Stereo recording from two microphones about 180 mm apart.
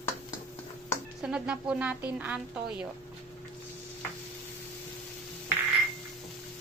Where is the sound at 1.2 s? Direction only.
5° right (ahead or behind).